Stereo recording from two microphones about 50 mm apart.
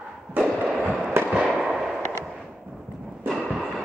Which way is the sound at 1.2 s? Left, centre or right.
Right.